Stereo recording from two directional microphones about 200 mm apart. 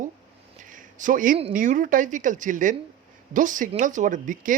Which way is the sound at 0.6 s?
40° right (ahead or behind).